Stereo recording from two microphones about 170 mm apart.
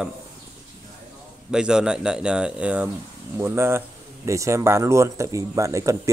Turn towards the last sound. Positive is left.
turn(degrees=-20)  # may be behind; listen again after turning